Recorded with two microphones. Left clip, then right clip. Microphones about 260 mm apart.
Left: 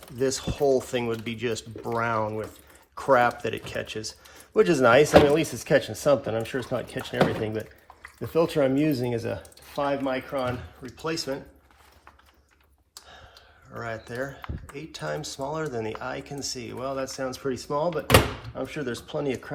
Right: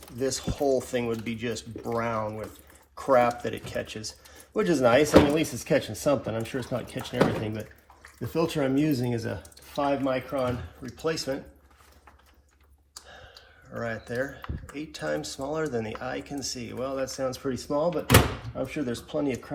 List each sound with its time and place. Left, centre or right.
0.2 s speech: left
13.7 s speech: left